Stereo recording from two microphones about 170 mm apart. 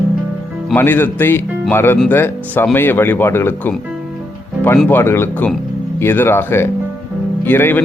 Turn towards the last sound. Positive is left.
turn(degrees=10)  # may be behind; listen again after turning